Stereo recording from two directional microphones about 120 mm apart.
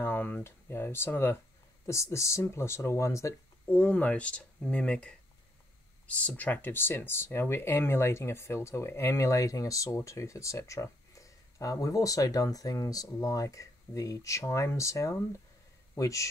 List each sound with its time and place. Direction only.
0.0 s speech: 15° left (ahead or behind)